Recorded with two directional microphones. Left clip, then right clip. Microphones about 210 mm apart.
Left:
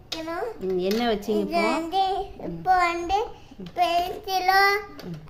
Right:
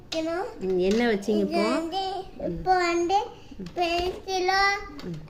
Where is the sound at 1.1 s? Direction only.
Centre (ahead or behind).